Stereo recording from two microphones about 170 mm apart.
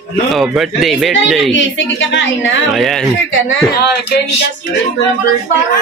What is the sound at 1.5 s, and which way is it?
A woman's voice, 90° left.